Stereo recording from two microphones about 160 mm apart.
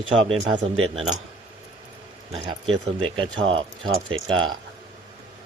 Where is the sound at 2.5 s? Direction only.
35° right (ahead or behind).